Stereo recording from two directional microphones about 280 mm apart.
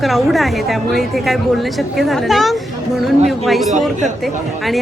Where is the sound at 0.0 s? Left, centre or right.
Centre.